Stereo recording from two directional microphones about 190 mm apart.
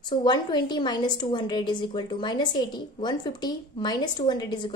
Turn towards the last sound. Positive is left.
turn(degrees=25)  # may be behind; listen again after turning